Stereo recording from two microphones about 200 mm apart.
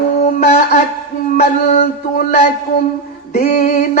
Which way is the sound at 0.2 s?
35° left (ahead or behind).